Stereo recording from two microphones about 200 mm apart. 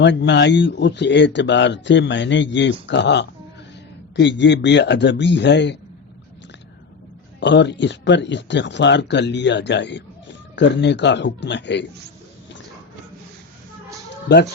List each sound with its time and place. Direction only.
0.0 s speech: 60° left (ahead or behind)
7.3 s speech: 60° left (ahead or behind)